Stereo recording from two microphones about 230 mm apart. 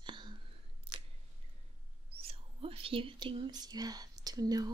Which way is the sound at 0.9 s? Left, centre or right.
Right.